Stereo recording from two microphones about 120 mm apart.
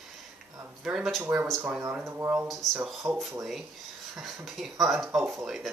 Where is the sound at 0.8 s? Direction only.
5° right (ahead or behind).